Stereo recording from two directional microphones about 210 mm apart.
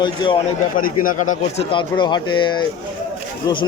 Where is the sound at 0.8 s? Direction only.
40° left (ahead or behind).